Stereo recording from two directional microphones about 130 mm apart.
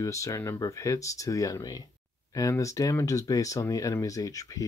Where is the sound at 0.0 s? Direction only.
25° left (ahead or behind).